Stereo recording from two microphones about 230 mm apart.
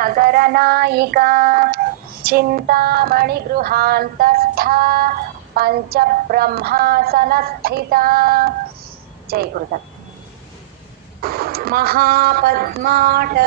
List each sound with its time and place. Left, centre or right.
0.0 s child singing: right
9.3 s speech: right
11.1 s speech: right